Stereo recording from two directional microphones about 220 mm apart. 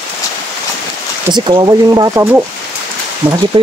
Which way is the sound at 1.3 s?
20° right (ahead or behind).